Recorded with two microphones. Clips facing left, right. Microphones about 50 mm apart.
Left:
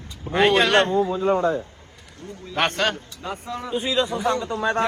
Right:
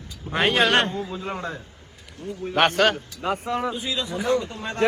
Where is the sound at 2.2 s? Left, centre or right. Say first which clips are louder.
Right 5 dB; right.